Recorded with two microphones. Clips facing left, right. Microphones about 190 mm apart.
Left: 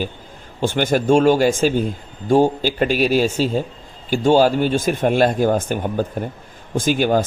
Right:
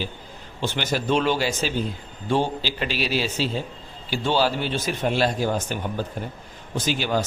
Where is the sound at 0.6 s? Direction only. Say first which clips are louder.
Left 8 dB; 50° left (ahead or behind).